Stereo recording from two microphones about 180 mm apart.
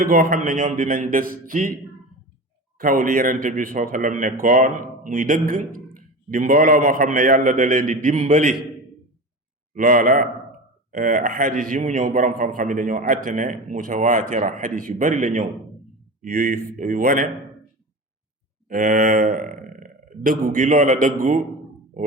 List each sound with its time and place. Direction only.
0.0 s a man's voice: 55° right (ahead or behind)
2.8 s a man's voice: 45° right (ahead or behind)
9.7 s a man's voice: 50° right (ahead or behind)
16.3 s a man's voice: 60° right (ahead or behind)
18.7 s a man's voice: 50° right (ahead or behind)
19.3 s burping: 55° right (ahead or behind)
20.4 s a man's voice: 45° right (ahead or behind)